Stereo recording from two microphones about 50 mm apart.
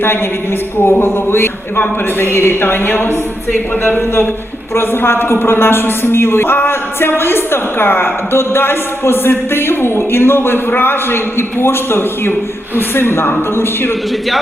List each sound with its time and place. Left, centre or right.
0.8 s a man's voice: left
4.7 s a man's voice: left